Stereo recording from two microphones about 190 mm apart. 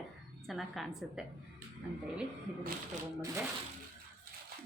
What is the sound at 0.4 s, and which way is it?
Speech, centre (ahead or behind).